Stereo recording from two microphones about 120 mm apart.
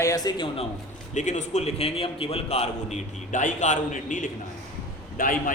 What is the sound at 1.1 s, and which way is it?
A man's voice, 80° left.